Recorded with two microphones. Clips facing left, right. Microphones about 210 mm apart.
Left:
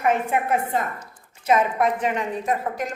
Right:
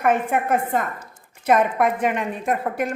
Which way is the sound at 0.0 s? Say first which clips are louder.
Right 2 dB; 50° right (ahead or behind).